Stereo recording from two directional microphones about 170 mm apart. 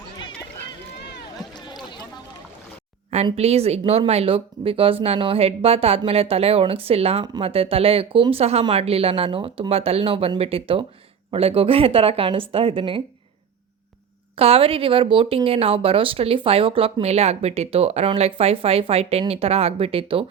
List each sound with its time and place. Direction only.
3.3 s speech: 35° right (ahead or behind)
14.3 s speech: 35° right (ahead or behind)